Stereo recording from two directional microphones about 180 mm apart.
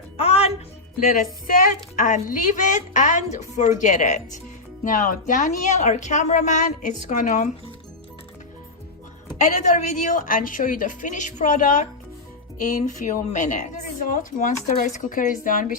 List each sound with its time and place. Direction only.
0.2 s music: 35° left (ahead or behind)
0.9 s a woman's voice: 50° left (ahead or behind)
9.4 s a woman's voice: 40° left (ahead or behind)